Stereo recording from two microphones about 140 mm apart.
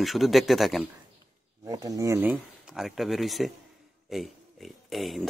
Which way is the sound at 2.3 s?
5° right (ahead or behind).